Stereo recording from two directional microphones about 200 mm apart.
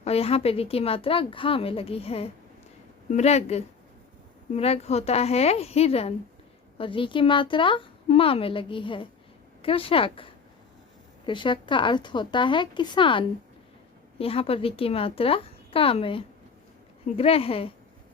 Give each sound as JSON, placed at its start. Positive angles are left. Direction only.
{"t": 0.0, "sound": "a woman's voice", "side_deg": 30}